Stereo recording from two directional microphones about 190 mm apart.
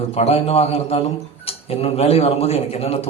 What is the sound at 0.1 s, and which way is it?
A man's voice, 30° left (ahead or behind).